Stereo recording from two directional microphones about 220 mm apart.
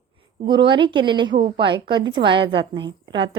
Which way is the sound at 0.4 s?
20° right (ahead or behind).